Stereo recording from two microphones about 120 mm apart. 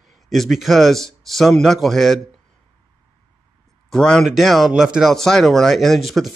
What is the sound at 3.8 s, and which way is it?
Speech, 5° left (ahead or behind).